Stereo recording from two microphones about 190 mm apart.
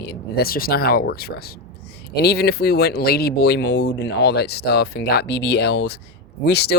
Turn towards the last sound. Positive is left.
turn(degrees=60)  # may be behind; listen again after turning